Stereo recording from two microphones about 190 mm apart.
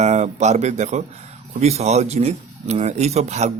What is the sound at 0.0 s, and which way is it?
Speech, 35° right (ahead or behind).